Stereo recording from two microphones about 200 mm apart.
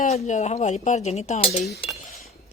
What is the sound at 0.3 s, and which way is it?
Speech, 35° left (ahead or behind).